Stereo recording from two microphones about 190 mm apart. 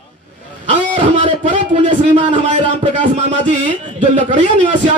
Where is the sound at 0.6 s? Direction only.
35° right (ahead or behind).